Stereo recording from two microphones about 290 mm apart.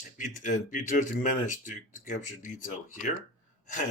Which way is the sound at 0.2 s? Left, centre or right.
Left.